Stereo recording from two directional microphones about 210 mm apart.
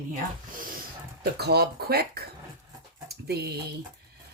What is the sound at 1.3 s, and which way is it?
Speech, 50° right (ahead or behind).